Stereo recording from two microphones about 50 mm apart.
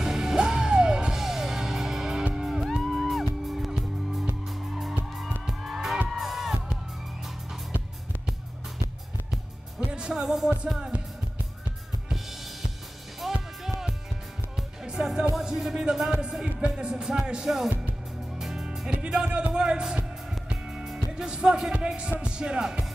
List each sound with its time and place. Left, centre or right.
0.0 s music: centre
5.5 s music: centre
9.9 s music: centre
13.2 s music: centre
21.7 s heart sounds: centre
22.2 s music: centre